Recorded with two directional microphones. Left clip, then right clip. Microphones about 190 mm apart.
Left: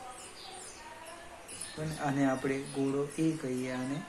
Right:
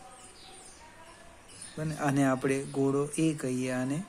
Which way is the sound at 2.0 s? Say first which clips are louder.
Right 3 dB; 60° right (ahead or behind).